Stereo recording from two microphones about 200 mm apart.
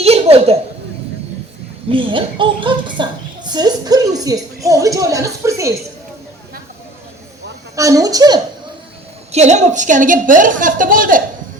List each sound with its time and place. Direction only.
0.0 s a sound: 30° right (ahead or behind)
1.9 s a woman's voice: 25° right (ahead or behind)
7.8 s speech: 15° right (ahead or behind)
9.3 s a woman's voice: 35° right (ahead or behind)